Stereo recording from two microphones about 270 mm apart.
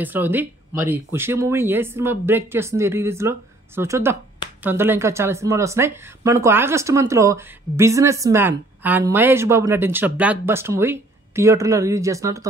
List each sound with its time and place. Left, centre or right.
0.0 s speech: centre